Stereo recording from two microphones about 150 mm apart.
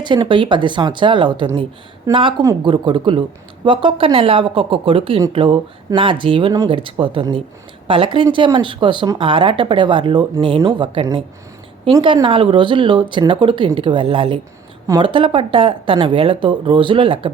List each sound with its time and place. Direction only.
0.0 s speech: 30° right (ahead or behind)
2.1 s a woman's voice: 20° right (ahead or behind)